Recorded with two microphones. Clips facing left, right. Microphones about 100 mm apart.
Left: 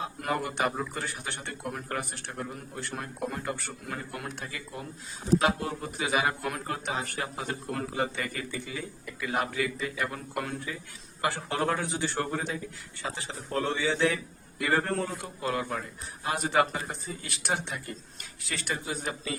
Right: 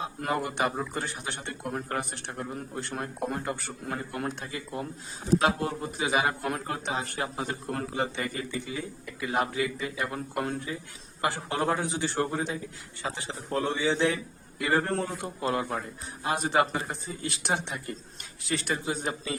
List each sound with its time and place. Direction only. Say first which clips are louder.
0.2 s a man's voice: right 1 dB; 25° right (ahead or behind)
3.8 s a man's voice: right 5 dB; 30° right (ahead or behind)